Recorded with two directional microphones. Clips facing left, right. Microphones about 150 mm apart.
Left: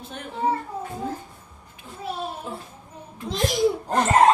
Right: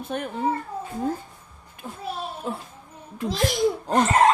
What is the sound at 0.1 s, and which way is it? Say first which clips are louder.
Speech: right 9 dB; 50° right (ahead or behind).